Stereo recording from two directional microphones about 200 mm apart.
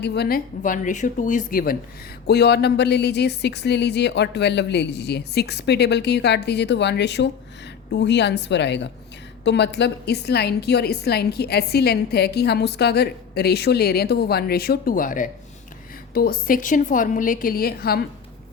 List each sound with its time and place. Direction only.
0.0 s a woman's voice: 55° left (ahead or behind)